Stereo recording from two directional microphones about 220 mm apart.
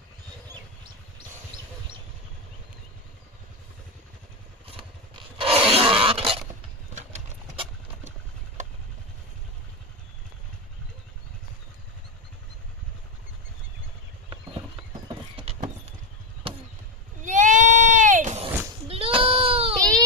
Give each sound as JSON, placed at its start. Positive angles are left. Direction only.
{"t": 4.6, "sound": "a sound", "side_deg": -25}
{"t": 7.0, "sound": "engine", "side_deg": -30}
{"t": 15.3, "sound": "clip-clop", "side_deg": -25}
{"t": 17.2, "sound": "sheep", "side_deg": -35}